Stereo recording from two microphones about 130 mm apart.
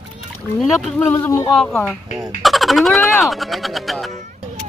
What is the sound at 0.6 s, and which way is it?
Speech, centre (ahead or behind).